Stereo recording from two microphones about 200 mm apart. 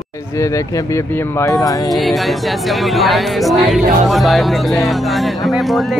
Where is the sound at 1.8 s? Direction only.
Centre (ahead or behind).